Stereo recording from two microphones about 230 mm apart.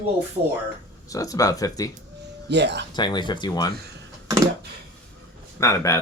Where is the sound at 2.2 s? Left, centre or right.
Right.